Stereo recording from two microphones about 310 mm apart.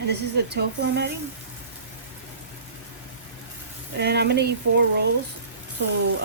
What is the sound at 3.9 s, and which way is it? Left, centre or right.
Speech, right.